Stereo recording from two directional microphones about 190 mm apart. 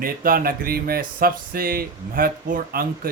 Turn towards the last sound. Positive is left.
turn(degrees=-50)  # may be behind; listen again after turning